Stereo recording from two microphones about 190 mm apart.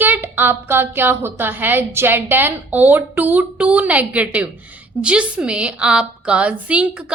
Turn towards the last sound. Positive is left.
turn(degrees=-5)  # may be behind; listen again after turning